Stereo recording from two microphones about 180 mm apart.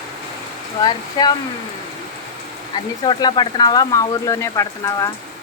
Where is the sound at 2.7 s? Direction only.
25° left (ahead or behind).